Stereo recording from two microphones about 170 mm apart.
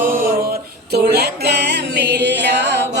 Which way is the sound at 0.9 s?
70° right (ahead or behind).